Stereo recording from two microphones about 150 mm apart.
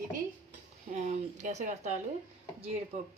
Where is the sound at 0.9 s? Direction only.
50° right (ahead or behind).